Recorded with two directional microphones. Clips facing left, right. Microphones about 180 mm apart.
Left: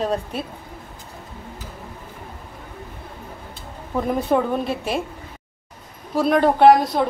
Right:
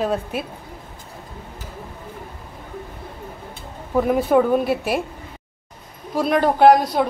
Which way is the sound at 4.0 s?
5° right (ahead or behind).